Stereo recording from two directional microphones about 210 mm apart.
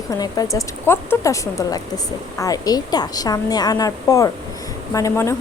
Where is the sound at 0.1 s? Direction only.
15° left (ahead or behind).